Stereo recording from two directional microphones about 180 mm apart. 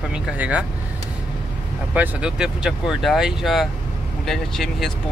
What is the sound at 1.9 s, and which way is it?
Speech, 5° right (ahead or behind).